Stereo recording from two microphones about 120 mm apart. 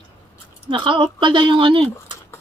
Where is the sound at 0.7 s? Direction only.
40° right (ahead or behind).